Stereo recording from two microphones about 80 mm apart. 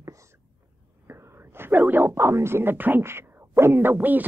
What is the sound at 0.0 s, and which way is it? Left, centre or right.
Whispering, right.